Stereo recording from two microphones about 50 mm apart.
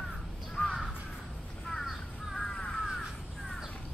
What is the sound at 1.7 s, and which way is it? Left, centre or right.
Crow, centre.